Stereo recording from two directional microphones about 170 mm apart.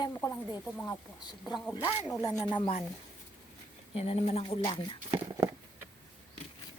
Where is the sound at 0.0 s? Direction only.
20° left (ahead or behind).